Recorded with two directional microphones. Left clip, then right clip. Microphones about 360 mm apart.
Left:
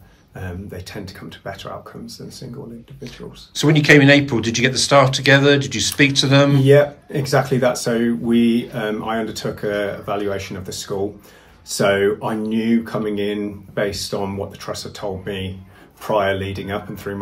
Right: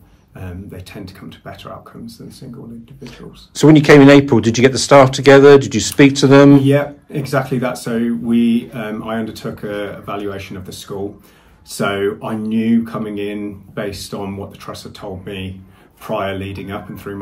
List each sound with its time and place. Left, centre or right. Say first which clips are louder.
0.4 s speech: left 1 dB; centre
3.0 s speech: left 3 dB; centre
6.6 s speech: left 3 dB; centre
11.7 s speech: left 2 dB; centre
16.1 s speech: left 3 dB; centre